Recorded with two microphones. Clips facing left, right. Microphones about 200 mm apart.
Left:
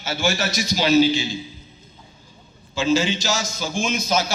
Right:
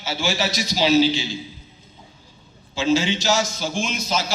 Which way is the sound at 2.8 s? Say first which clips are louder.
Even; 45° left (ahead or behind).